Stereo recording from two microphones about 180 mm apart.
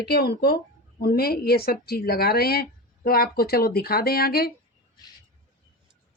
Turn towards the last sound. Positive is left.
turn(degrees=60)  # may be behind; listen again after turning